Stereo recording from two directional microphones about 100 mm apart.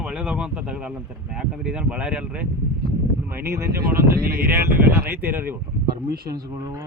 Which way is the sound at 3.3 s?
25° right (ahead or behind).